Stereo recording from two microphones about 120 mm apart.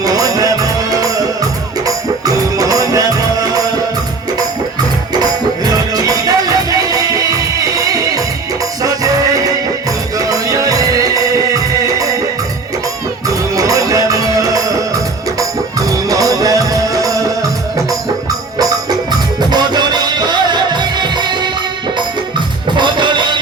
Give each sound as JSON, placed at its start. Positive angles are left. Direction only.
{"t": 0.0, "sound": "music", "side_deg": -30}
{"t": 5.1, "sound": "music", "side_deg": -35}
{"t": 13.2, "sound": "music", "side_deg": -30}
{"t": 19.5, "sound": "music", "side_deg": -35}
{"t": 22.8, "sound": "music", "side_deg": -40}